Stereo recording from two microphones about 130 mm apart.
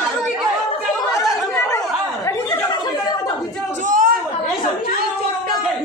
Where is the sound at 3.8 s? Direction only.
90° right.